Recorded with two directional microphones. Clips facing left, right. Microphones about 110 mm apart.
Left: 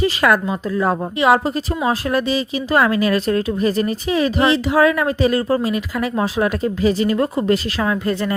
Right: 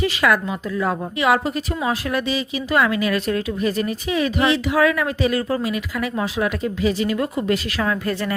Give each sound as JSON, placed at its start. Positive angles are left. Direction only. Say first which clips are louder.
{"t": 0.0, "sound": "speech", "louder": "left 3 dB", "side_deg": 40}
{"t": 7.8, "sound": "speech", "louder": "left 3 dB", "side_deg": 25}